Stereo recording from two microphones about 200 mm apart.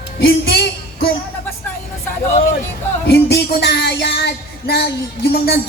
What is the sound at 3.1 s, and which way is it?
A woman's voice, 55° left (ahead or behind).